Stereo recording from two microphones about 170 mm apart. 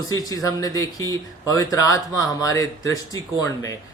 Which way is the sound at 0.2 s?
20° left (ahead or behind).